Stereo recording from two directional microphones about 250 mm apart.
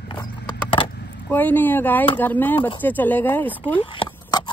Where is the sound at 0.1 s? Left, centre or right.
Centre.